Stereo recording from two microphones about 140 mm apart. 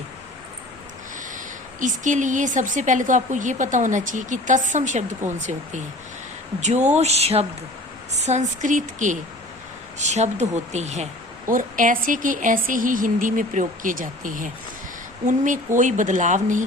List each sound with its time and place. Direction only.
1.8 s a woman's voice: 65° right (ahead or behind)
6.6 s a sound: 55° right (ahead or behind)
8.1 s a woman's voice: 55° right (ahead or behind)